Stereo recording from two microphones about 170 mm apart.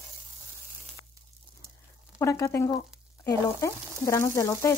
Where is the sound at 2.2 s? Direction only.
15° left (ahead or behind).